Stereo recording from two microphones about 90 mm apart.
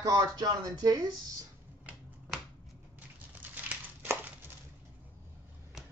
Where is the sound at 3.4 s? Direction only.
20° right (ahead or behind).